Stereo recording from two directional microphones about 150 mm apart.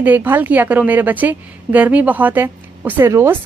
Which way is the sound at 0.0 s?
10° right (ahead or behind).